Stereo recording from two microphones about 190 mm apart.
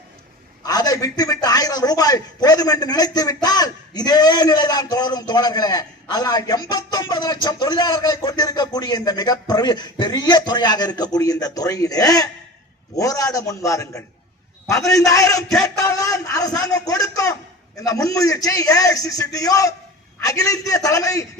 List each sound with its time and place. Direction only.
0.6 s a man's voice: 20° left (ahead or behind)